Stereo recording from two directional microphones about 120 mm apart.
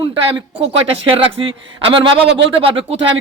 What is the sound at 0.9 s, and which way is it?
A man's voice, 50° right (ahead or behind).